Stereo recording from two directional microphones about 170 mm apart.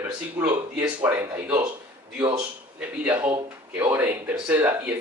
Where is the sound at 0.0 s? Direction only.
10° right (ahead or behind).